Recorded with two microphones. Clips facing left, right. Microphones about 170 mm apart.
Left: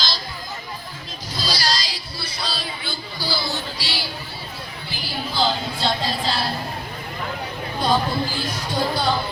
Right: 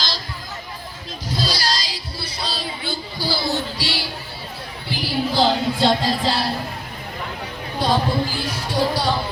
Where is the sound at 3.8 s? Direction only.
65° right (ahead or behind).